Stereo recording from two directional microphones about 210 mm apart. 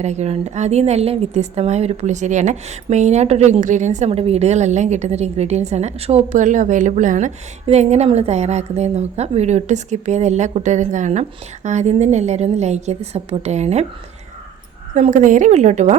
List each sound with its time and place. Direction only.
0.0 s a woman's voice: 30° right (ahead or behind)
14.9 s a woman's voice: 35° right (ahead or behind)